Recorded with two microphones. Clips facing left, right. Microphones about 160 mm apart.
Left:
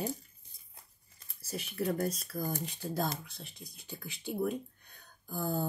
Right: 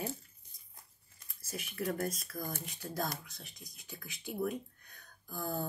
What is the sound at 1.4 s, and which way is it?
Speech, 30° left (ahead or behind).